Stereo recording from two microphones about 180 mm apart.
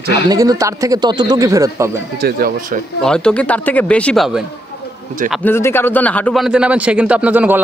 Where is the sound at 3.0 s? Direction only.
5° left (ahead or behind).